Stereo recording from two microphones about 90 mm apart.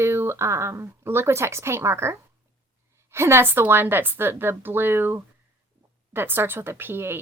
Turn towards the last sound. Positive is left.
turn(degrees=-25)  # may be behind; listen again after turning